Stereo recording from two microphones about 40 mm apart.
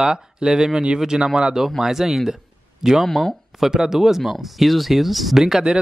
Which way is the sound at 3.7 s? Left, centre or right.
Centre.